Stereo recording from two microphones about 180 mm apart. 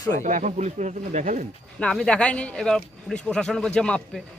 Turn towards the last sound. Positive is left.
turn(degrees=5)  # may be behind; listen again after turning